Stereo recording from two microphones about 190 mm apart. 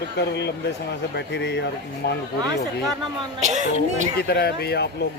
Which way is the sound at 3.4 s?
40° right (ahead or behind).